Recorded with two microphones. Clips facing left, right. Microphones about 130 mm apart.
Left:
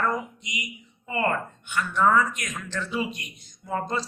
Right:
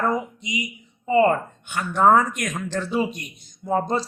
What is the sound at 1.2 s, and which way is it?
Speech, 40° right (ahead or behind).